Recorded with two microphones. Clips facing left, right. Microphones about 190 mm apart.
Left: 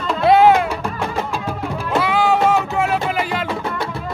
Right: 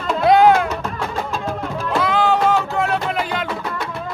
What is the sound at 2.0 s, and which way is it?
Music, 10° left (ahead or behind).